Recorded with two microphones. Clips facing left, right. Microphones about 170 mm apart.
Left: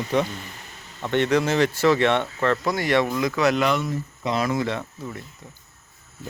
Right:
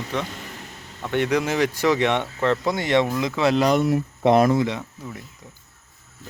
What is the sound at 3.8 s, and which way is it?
Speech, 65° right (ahead or behind).